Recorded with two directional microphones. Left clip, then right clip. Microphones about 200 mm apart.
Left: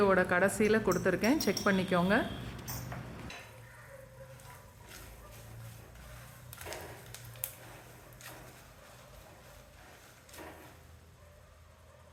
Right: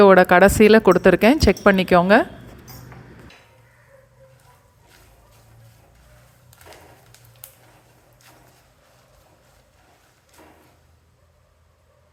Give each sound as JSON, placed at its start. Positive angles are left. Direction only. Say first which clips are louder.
{"t": 0.0, "sound": "speech", "louder": "right 16 dB", "side_deg": -40}